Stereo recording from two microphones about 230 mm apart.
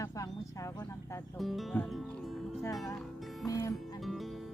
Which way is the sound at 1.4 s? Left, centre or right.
Centre.